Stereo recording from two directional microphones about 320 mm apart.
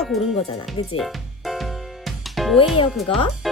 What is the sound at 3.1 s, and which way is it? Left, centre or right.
Speech, centre.